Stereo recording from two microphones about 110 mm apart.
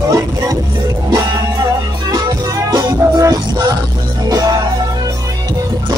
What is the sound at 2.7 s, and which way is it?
Music, 35° right (ahead or behind).